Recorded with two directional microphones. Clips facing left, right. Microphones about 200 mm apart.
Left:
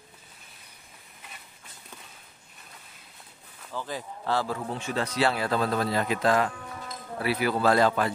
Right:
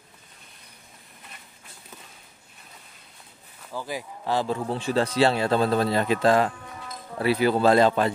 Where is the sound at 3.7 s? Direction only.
10° right (ahead or behind).